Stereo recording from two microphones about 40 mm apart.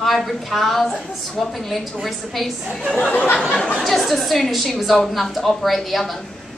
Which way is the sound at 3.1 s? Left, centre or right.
Left.